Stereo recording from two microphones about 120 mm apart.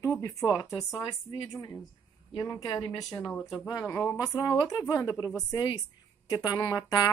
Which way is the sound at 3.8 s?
20° left (ahead or behind).